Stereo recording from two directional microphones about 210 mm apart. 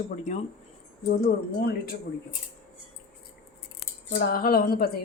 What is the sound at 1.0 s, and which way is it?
Speech, 50° left (ahead or behind).